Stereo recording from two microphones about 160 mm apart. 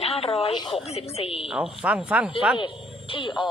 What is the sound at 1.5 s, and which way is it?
Speech, 5° right (ahead or behind).